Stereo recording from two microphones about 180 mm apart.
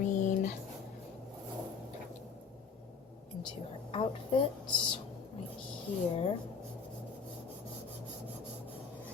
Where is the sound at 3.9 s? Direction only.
30° left (ahead or behind).